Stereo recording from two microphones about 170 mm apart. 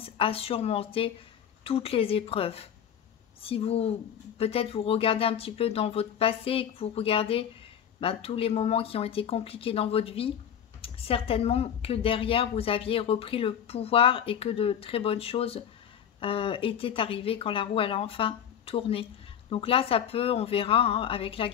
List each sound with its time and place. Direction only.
0.0 s speech: 35° left (ahead or behind)